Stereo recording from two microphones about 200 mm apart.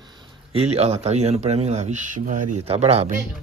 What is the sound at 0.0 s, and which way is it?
A man's voice, 20° right (ahead or behind).